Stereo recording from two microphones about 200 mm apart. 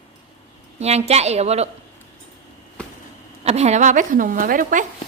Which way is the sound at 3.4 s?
30° right (ahead or behind).